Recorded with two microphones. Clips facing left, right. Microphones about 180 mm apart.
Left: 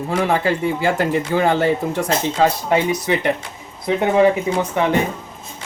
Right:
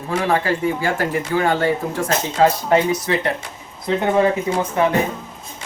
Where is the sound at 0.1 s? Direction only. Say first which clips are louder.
Even; 20° left (ahead or behind).